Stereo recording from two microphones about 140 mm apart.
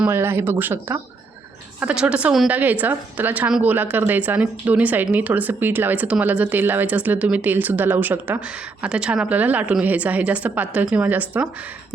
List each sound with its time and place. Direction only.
0.0 s a woman's voice: 15° right (ahead or behind)